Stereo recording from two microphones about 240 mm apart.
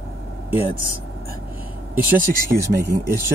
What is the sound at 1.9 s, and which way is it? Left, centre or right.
Speech, centre.